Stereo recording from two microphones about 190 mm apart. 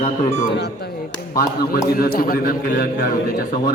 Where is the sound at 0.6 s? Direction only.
60° left (ahead or behind).